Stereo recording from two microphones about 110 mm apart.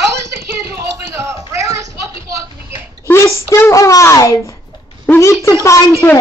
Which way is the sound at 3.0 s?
25° left (ahead or behind).